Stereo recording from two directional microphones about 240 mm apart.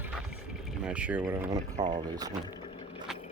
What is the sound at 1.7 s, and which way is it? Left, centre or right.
Speech, right.